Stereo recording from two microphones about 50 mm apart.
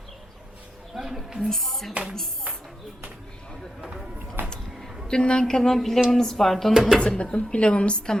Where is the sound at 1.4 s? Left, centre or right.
Centre.